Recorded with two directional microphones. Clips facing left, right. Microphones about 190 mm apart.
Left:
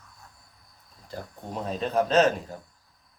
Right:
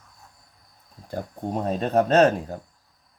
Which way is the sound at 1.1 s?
55° right (ahead or behind).